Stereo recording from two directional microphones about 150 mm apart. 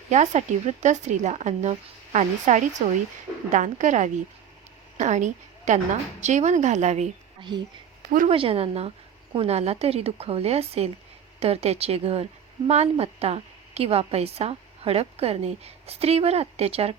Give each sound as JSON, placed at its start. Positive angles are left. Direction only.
{"t": 0.1, "sound": "a woman's voice", "side_deg": -50}
{"t": 7.5, "sound": "speech", "side_deg": -30}
{"t": 8.3, "sound": "speech", "side_deg": -40}